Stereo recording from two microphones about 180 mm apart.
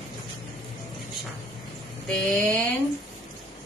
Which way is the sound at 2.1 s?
5° left (ahead or behind).